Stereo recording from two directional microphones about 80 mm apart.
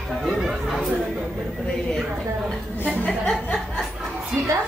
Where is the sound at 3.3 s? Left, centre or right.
Centre.